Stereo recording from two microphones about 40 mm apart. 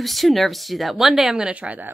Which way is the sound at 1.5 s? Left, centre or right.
Right.